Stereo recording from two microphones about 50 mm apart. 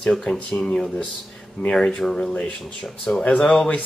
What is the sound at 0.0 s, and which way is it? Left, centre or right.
Speech, centre.